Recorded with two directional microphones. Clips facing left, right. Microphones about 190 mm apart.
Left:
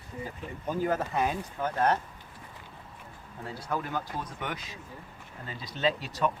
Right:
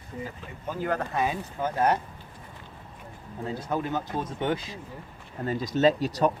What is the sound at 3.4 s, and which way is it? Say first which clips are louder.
Speech: right 4 dB; 20° right (ahead or behind).